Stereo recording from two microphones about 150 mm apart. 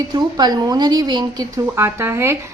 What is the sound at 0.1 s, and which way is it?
Speech, 25° right (ahead or behind).